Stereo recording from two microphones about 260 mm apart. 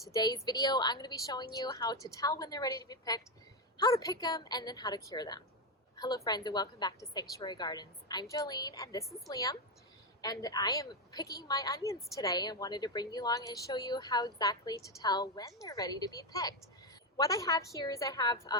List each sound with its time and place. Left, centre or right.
0.1 s a woman's voice: centre